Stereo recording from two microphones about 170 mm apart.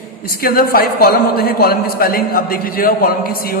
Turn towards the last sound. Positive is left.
turn(degrees=60)  # may be behind; listen again after turning